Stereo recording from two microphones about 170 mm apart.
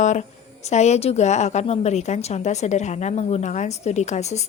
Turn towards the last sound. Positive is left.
turn(degrees=40)  # may be behind; listen again after turning